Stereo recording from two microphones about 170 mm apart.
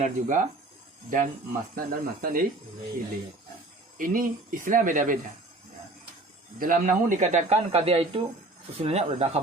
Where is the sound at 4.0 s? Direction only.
55° right (ahead or behind).